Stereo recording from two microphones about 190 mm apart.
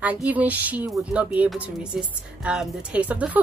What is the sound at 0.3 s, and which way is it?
A child's voice, 10° right (ahead or behind).